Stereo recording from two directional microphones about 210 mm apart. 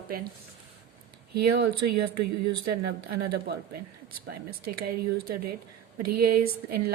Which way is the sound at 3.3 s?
50° right (ahead or behind).